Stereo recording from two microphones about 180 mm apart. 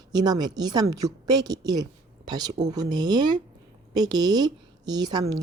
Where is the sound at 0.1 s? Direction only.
20° right (ahead or behind).